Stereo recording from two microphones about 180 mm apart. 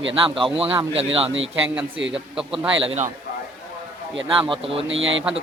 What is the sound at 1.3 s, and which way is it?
Speech, 90° right.